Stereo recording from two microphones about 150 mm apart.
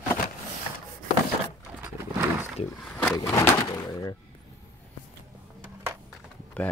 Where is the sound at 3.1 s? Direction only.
20° left (ahead or behind).